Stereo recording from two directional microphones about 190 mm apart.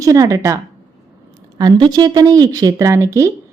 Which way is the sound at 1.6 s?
20° right (ahead or behind).